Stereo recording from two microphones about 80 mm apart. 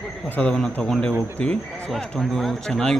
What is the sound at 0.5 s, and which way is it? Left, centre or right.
Speech, centre.